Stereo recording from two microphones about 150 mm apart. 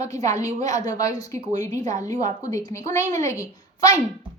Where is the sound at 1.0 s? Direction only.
25° left (ahead or behind).